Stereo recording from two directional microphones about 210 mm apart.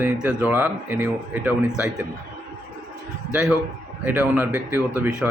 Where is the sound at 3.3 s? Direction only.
5° right (ahead or behind).